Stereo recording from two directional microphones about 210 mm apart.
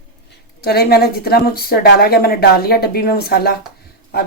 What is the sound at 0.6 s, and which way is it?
A woman's voice, 50° left (ahead or behind).